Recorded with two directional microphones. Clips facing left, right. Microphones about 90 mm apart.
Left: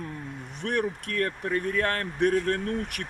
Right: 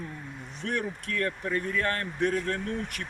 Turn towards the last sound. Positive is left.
turn(degrees=60)  # may be behind; listen again after turning